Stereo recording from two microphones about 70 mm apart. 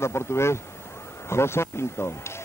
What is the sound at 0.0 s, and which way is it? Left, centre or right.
Speech, left.